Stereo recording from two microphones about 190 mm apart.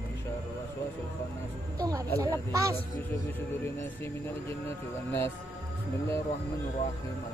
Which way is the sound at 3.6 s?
10° left (ahead or behind).